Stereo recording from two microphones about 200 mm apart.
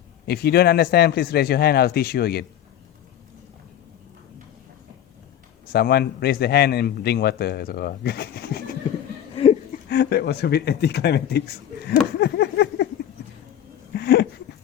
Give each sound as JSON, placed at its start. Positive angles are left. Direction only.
{"t": 0.3, "sound": "a man's voice", "side_deg": 50}
{"t": 5.6, "sound": "a man's voice", "side_deg": 50}
{"t": 9.3, "sound": "laughter", "side_deg": 30}
{"t": 9.9, "sound": "speech", "side_deg": 55}
{"t": 13.9, "sound": "dog", "side_deg": 50}